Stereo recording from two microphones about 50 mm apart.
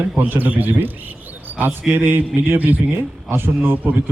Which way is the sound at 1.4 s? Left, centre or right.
Right.